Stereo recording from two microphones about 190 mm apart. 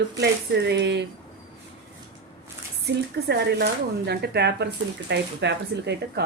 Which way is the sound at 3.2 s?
60° right (ahead or behind).